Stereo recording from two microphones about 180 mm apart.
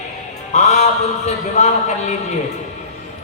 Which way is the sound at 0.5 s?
40° left (ahead or behind).